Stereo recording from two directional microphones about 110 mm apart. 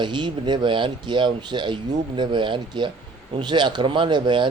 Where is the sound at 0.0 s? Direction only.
45° right (ahead or behind).